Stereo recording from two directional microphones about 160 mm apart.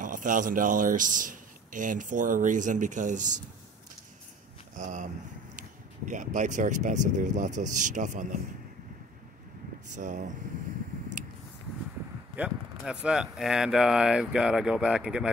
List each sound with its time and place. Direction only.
0.0 s speech: 55° right (ahead or behind)
4.7 s speech: 50° right (ahead or behind)
9.8 s speech: 50° right (ahead or behind)
12.4 s speech: 5° right (ahead or behind)